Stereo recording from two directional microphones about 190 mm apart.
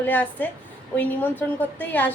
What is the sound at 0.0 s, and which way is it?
A woman's voice, 10° left (ahead or behind).